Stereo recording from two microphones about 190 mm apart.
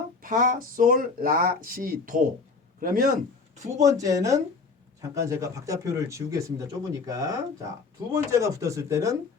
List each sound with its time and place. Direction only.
0.2 s speech: 45° right (ahead or behind)
3.8 s speech: 20° right (ahead or behind)